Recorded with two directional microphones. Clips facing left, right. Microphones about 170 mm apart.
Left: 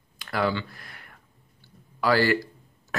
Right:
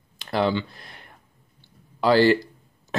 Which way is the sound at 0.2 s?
25° right (ahead or behind).